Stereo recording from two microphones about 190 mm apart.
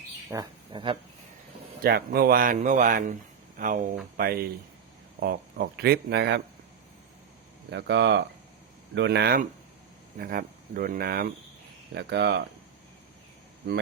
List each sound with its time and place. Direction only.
0.3 s speech: 20° right (ahead or behind)
1.8 s speech: 55° right (ahead or behind)
7.7 s speech: 65° right (ahead or behind)
11.9 s speech: 60° right (ahead or behind)